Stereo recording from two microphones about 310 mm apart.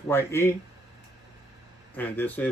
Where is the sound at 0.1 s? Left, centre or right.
Centre.